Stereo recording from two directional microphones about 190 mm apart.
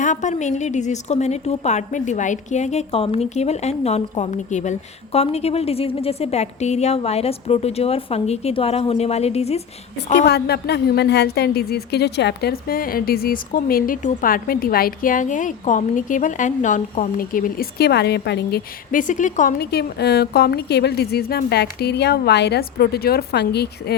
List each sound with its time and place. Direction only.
0.0 s a woman's voice: 40° left (ahead or behind)
10.2 s a woman's voice: 60° left (ahead or behind)
18.9 s a woman's voice: 45° left (ahead or behind); by 23.9 s 60° left (ahead or behind)